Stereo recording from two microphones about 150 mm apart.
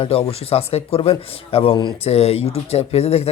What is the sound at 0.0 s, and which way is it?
Speech, 40° left (ahead or behind).